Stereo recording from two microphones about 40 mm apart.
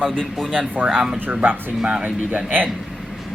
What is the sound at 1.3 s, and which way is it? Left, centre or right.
Speech, right.